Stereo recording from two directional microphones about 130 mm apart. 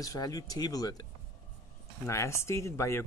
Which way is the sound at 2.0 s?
20° left (ahead or behind).